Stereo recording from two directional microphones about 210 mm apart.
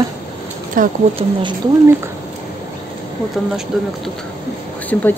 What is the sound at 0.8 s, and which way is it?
Speech, 40° right (ahead or behind).